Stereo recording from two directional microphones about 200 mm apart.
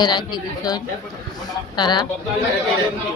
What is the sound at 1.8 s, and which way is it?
Speech, 20° left (ahead or behind).